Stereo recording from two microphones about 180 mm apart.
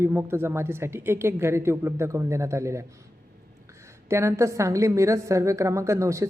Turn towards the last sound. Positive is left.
turn(degrees=-15)  # may be behind; listen again after turning